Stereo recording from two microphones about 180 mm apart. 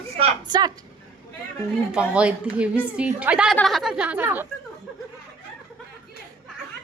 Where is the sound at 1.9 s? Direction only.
5° right (ahead or behind).